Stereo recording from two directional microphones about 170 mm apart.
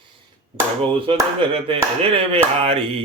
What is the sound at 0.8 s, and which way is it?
Speech, 30° right (ahead or behind).